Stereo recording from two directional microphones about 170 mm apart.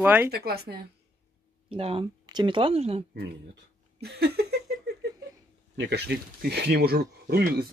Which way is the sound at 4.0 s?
70° right (ahead or behind).